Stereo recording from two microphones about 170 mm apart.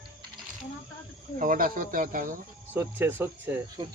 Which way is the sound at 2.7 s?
10° right (ahead or behind).